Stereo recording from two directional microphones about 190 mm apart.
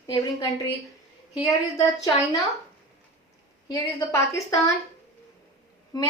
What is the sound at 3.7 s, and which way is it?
Speech, 15° left (ahead or behind).